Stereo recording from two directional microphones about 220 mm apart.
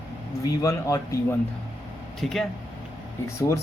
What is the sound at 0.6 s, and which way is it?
Speech, 15° left (ahead or behind).